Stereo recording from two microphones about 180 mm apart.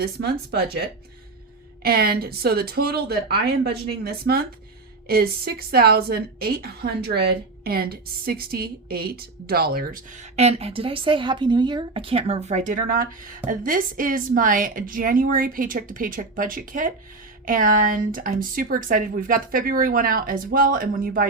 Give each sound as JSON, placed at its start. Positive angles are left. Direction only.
{"t": 0.0, "sound": "speech", "side_deg": -60}
{"t": 10.3, "sound": "speech", "side_deg": -35}